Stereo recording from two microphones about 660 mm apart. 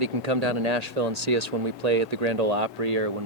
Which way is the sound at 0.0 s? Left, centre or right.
Right.